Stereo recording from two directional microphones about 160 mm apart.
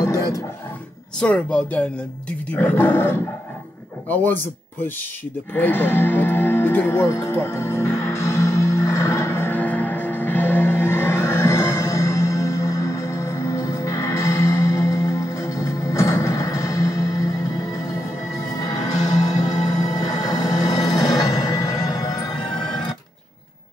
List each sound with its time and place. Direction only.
1.2 s speech: 5° left (ahead or behind)
5.5 s music: 10° left (ahead or behind)